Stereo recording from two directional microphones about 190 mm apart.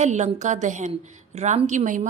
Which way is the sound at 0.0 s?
40° right (ahead or behind).